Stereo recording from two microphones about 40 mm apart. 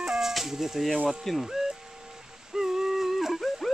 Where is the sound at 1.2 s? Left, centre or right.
Centre.